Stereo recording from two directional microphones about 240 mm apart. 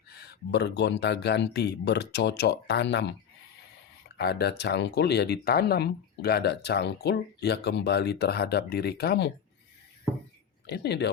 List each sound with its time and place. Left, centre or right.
0.2 s speech: left
4.2 s speech: left
10.7 s speech: left